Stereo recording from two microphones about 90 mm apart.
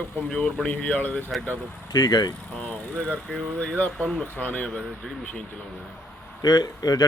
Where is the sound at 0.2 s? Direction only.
10° left (ahead or behind).